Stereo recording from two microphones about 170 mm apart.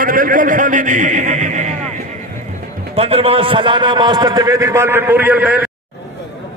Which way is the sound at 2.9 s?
35° right (ahead or behind).